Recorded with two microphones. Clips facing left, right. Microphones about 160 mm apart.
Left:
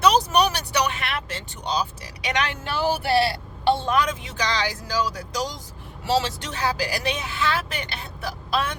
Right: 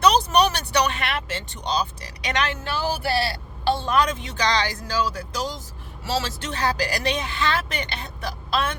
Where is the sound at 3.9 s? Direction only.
10° left (ahead or behind).